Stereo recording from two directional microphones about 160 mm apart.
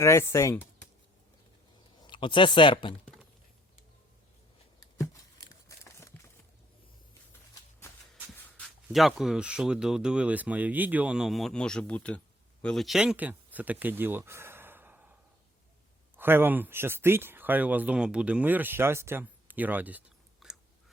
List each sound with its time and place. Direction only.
0.0 s speech: 15° left (ahead or behind)
2.0 s speech: 30° left (ahead or behind)
4.9 s tearing: 20° left (ahead or behind)
8.1 s speech: centre (ahead or behind)
16.1 s speech: 15° right (ahead or behind)
20.4 s chewing: centre (ahead or behind)